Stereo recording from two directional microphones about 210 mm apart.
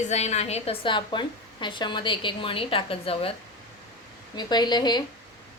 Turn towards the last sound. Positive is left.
turn(degrees=20)  # may be behind; listen again after turning